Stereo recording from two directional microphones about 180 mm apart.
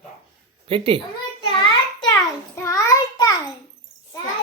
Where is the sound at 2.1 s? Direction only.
15° left (ahead or behind).